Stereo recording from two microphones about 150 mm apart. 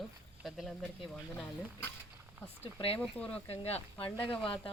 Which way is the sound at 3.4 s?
40° left (ahead or behind).